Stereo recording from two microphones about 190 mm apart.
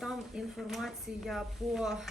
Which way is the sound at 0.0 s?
Centre (ahead or behind).